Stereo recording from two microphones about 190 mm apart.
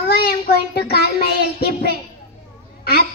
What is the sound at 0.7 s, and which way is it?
Child singing, 55° left (ahead or behind).